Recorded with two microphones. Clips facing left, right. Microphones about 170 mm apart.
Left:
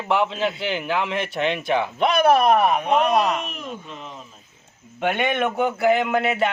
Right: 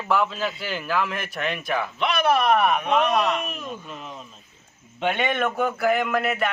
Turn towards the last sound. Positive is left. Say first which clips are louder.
# left 3 dB
turn(degrees=25)  # may be behind; listen again after turning